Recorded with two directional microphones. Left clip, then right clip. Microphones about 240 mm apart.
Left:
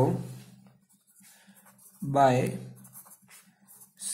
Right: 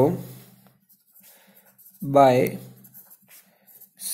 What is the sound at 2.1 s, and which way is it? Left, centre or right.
Speech, right.